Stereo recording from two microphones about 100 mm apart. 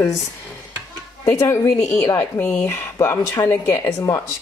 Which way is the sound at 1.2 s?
30° left (ahead or behind).